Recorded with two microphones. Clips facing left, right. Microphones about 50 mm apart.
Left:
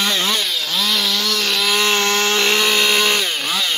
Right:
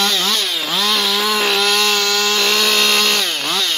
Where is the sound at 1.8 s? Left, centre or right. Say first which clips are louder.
Even; left.